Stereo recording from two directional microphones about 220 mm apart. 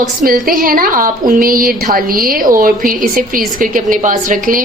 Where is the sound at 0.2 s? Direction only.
40° right (ahead or behind).